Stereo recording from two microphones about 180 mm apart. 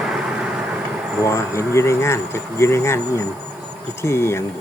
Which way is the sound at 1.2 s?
15° left (ahead or behind).